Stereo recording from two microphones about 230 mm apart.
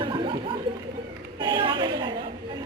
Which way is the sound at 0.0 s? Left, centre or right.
Right.